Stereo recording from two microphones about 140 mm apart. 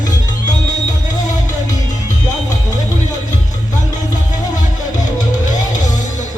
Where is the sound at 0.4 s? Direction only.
60° left (ahead or behind).